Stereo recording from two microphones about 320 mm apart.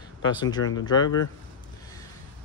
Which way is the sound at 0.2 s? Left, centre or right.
Centre.